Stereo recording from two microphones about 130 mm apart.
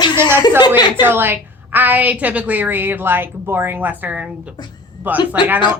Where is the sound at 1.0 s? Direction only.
15° right (ahead or behind).